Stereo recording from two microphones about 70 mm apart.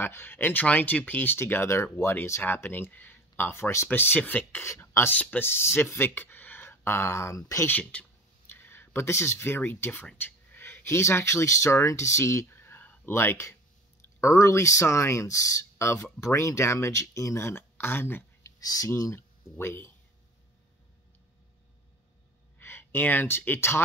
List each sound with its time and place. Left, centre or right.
0.0 s speech: left
8.5 s a sound: left
9.8 s speech: left
18.6 s speech: left
19.1 s speech: left
22.6 s speech: left